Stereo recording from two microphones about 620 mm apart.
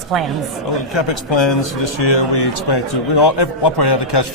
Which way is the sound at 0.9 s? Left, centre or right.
Left.